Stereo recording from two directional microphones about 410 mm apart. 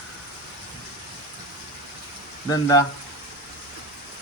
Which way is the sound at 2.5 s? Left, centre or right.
Centre.